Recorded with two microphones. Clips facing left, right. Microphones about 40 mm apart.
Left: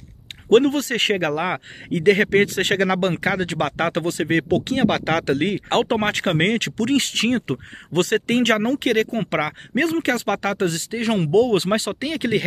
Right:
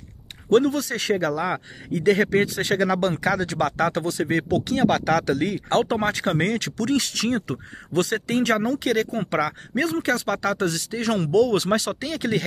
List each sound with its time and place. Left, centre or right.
0.5 s speech: left